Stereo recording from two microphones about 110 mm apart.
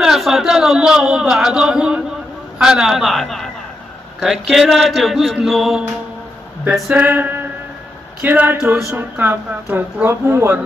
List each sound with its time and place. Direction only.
0.0 s speech: centre (ahead or behind)
6.9 s male singing: 15° right (ahead or behind)
8.2 s a sound: 15° right (ahead or behind)
8.9 s speech: 20° right (ahead or behind)